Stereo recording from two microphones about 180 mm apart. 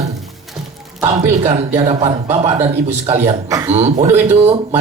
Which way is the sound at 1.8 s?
35° right (ahead or behind).